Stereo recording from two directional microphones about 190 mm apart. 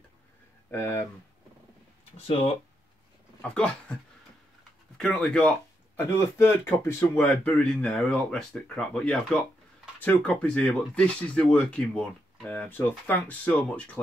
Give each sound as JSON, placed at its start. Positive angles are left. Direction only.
{"t": 0.7, "sound": "speech", "side_deg": 15}
{"t": 2.2, "sound": "speech", "side_deg": 30}
{"t": 3.3, "sound": "speech", "side_deg": 5}